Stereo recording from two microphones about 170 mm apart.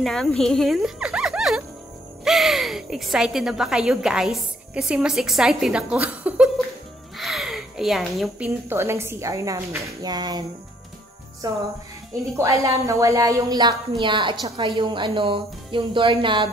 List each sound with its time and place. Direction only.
0.0 s speech: 5° left (ahead or behind)
7.2 s a sound: centre (ahead or behind)
8.6 s a woman's voice: 15° right (ahead or behind)
11.4 s speech: 20° right (ahead or behind)